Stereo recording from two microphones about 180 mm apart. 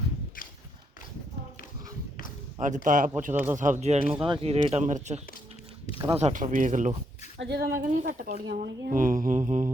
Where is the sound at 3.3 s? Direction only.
10° right (ahead or behind).